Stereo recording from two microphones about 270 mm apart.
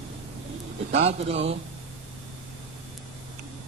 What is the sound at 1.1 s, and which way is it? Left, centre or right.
Speech, right.